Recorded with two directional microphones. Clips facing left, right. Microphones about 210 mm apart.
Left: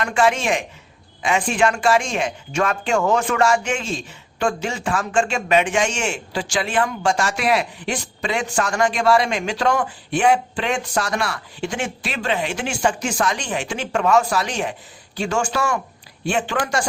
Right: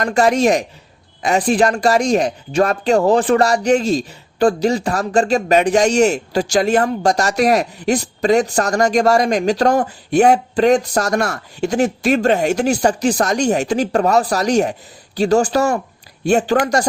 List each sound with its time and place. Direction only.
0.0 s a man's voice: 40° right (ahead or behind)